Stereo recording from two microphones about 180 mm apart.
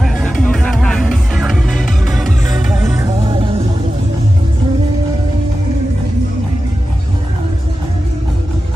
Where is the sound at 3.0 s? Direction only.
20° right (ahead or behind).